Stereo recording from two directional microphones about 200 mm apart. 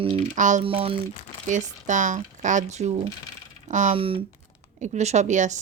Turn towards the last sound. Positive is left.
turn(degrees=-35)  # may be behind; listen again after turning